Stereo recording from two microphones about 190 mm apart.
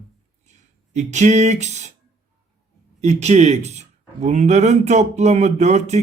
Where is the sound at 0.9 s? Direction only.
40° right (ahead or behind).